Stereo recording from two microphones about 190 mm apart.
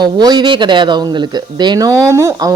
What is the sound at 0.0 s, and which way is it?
Speech, 20° right (ahead or behind).